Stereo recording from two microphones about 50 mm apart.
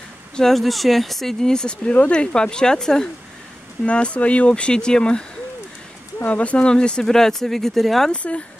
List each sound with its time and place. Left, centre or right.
0.4 s speech: centre
3.8 s speech: left
6.2 s speech: left; by 8.1 s centre
8.1 s speech: left